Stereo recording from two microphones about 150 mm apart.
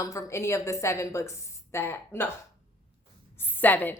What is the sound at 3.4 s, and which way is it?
Speech, 10° left (ahead or behind).